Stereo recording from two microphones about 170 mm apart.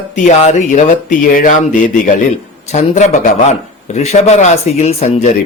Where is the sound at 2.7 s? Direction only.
45° left (ahead or behind).